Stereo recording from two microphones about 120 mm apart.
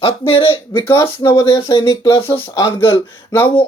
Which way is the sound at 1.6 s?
45° left (ahead or behind).